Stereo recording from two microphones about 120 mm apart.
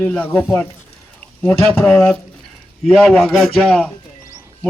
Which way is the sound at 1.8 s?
5° left (ahead or behind).